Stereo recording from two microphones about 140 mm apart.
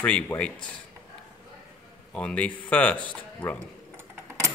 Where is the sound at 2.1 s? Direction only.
10° left (ahead or behind).